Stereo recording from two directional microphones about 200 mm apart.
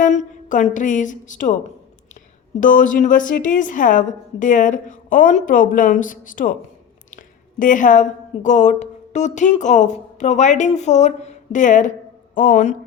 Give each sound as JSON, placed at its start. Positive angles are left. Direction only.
{"t": 0.0, "sound": "a woman's voice", "side_deg": 35}
{"t": 2.6, "sound": "a woman's voice", "side_deg": 40}
{"t": 7.6, "sound": "a woman's voice", "side_deg": 40}